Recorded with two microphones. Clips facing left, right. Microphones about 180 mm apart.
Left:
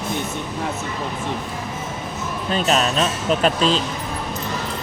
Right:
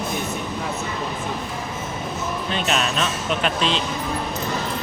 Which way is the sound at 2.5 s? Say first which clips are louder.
Left 5 dB; 35° left (ahead or behind).